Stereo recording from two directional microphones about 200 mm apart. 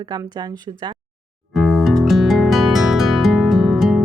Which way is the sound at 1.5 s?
Centre (ahead or behind).